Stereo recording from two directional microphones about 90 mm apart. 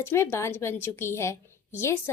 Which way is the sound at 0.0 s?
25° left (ahead or behind).